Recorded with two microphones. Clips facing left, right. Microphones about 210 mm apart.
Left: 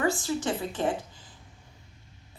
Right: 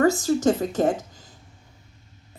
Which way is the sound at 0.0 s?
40° right (ahead or behind).